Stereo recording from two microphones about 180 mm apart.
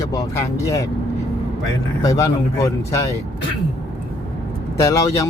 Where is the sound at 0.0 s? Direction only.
20° left (ahead or behind).